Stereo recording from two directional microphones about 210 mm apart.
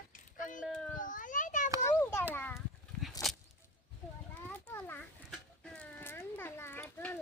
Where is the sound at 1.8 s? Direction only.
10° left (ahead or behind).